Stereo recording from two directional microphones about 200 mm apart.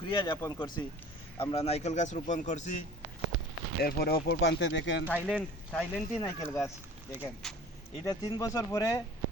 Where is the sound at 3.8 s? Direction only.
50° left (ahead or behind).